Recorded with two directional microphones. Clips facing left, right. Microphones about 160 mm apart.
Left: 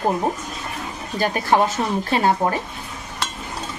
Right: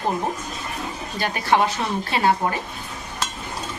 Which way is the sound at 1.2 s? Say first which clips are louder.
Left 2 dB; 45° left (ahead or behind).